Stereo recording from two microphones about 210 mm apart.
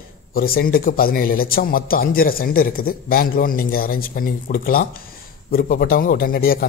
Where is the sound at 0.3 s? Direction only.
45° left (ahead or behind).